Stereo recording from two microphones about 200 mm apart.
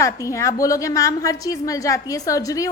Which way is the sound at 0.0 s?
15° left (ahead or behind).